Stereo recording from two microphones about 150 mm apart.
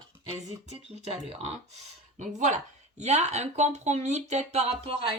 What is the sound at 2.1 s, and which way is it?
Speech, 50° right (ahead or behind).